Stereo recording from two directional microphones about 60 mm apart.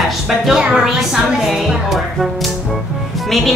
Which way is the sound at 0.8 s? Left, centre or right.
Centre.